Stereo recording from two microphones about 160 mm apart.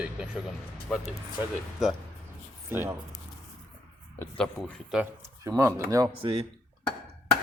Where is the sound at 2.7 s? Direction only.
15° right (ahead or behind).